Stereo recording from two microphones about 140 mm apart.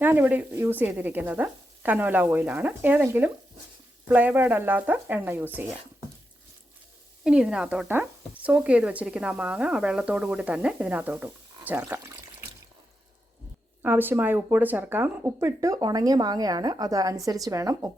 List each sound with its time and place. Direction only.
0.0 s speech: 10° right (ahead or behind)
7.3 s speech: 5° right (ahead or behind)
13.8 s speech: 15° right (ahead or behind)